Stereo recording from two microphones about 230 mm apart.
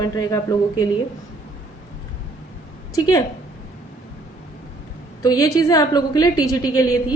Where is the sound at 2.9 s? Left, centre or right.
Centre.